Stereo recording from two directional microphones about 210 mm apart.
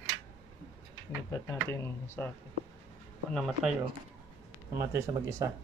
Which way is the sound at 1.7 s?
10° left (ahead or behind).